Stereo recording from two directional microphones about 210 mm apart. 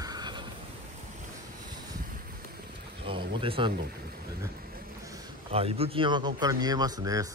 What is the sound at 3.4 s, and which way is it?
Speech, 25° right (ahead or behind).